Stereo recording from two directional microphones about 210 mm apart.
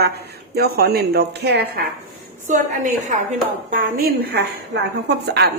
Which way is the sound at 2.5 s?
35° right (ahead or behind).